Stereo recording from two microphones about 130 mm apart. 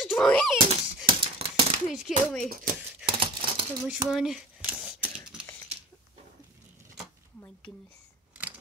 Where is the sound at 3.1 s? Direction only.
45° right (ahead or behind).